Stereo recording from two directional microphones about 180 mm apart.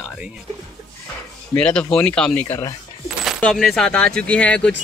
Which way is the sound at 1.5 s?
5° left (ahead or behind).